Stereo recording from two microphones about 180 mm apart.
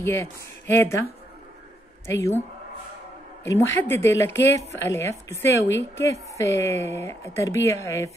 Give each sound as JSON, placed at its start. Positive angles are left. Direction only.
{"t": 0.0, "sound": "speech", "side_deg": 15}
{"t": 2.0, "sound": "speech", "side_deg": 15}
{"t": 3.4, "sound": "speech", "side_deg": 15}